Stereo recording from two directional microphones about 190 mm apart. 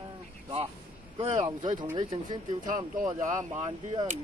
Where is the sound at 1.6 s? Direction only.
40° right (ahead or behind).